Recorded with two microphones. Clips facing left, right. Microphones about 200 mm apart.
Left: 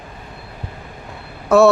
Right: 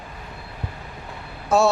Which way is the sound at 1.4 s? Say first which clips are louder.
Left 7 dB; 65° left (ahead or behind).